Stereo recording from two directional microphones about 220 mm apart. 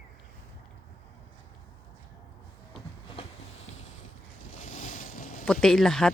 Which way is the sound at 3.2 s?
25° left (ahead or behind).